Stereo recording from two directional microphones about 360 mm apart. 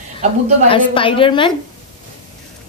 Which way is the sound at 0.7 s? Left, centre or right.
Centre.